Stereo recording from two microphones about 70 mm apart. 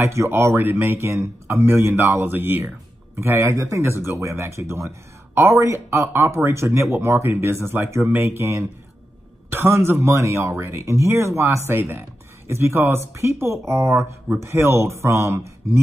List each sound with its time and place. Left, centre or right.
0.0 s speech: right
3.2 s a man's voice: right
3.8 s speech: right